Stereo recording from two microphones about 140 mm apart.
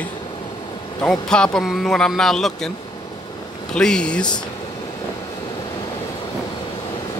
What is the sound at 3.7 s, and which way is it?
Speech, 5° left (ahead or behind).